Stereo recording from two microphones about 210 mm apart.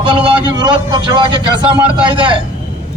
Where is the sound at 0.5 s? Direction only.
20° right (ahead or behind).